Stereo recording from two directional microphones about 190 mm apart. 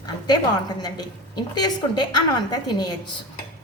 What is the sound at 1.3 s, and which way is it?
A woman's voice, 25° left (ahead or behind).